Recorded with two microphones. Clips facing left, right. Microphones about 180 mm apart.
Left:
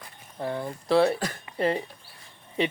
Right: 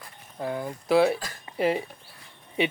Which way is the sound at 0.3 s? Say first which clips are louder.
Even; 5° right (ahead or behind).